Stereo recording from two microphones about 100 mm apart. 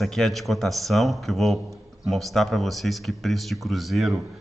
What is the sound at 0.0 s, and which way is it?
A man's voice, centre (ahead or behind).